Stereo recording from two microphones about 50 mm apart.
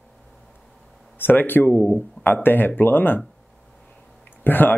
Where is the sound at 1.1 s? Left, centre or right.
Left.